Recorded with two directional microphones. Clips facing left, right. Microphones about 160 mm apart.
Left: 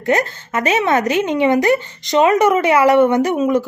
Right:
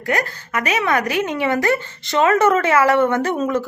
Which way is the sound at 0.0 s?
25° left (ahead or behind).